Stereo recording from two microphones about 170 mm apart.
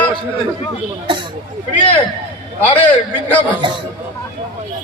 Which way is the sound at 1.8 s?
30° left (ahead or behind).